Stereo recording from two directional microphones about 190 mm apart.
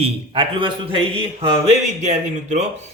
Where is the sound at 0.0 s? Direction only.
25° right (ahead or behind).